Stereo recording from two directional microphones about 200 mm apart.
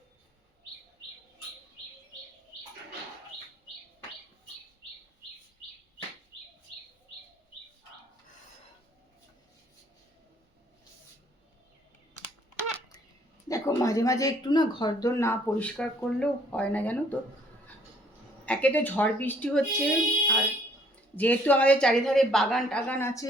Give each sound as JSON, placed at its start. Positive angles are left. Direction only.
{"t": 13.5, "sound": "speech", "side_deg": 15}
{"t": 18.4, "sound": "a woman's voice", "side_deg": 5}